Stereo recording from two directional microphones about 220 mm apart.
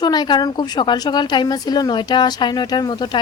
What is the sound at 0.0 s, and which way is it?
A woman's voice, 20° left (ahead or behind).